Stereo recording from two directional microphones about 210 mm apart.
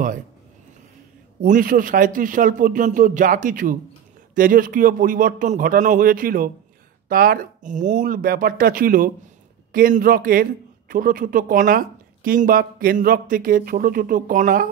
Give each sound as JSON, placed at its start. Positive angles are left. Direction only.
{"t": 1.4, "sound": "a man's voice", "side_deg": -40}